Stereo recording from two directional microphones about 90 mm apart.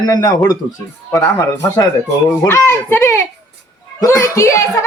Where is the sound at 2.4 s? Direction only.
30° left (ahead or behind).